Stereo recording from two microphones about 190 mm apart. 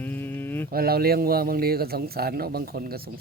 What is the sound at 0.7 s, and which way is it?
A man's voice, 55° right (ahead or behind).